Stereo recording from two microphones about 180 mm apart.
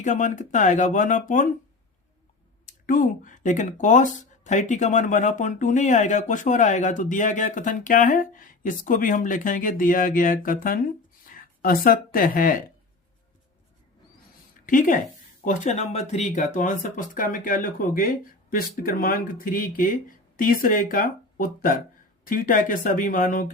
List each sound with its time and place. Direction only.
0.0 s speech: 45° left (ahead or behind)
2.6 s speech: 45° left (ahead or behind)
14.7 s speech: 45° left (ahead or behind)